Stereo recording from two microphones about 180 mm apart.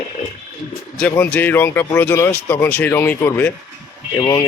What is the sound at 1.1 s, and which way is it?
Speech, 10° left (ahead or behind).